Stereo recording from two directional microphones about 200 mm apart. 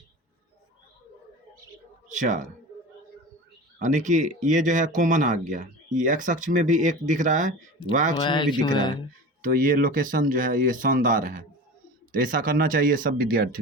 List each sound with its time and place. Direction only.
2.0 s speech: 40° right (ahead or behind)
3.8 s speech: 35° right (ahead or behind)
8.2 s speech: 25° left (ahead or behind)
9.4 s speech: 40° right (ahead or behind)